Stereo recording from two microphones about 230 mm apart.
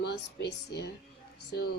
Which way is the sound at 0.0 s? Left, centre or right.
Left.